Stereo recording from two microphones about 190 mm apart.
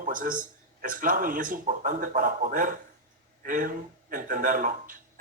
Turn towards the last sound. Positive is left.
turn(degrees=-45)  # may be behind; listen again after turning